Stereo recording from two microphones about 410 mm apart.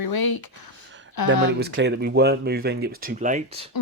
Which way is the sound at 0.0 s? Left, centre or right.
Left.